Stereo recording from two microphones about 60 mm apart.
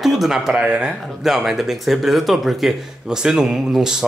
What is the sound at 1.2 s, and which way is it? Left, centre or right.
Speech, centre.